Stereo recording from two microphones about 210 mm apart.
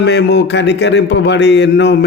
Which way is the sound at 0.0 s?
55° left (ahead or behind).